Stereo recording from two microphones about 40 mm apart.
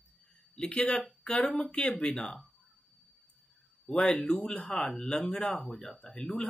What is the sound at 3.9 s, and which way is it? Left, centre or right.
Speech, left.